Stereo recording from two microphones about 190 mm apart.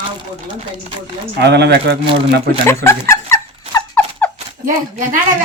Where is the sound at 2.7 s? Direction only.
15° left (ahead or behind).